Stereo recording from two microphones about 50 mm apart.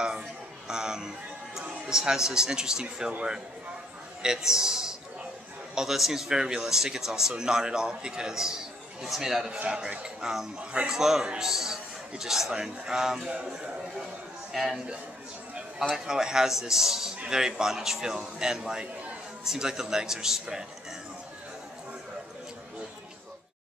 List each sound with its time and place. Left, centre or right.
0.7 s a sound: centre
1.9 s a man's voice: centre
3.1 s a man's voice: right
4.2 s a man's voice: centre
11.0 s a man's voice: centre
14.5 s a man's voice: centre
16.1 s a man's voice: centre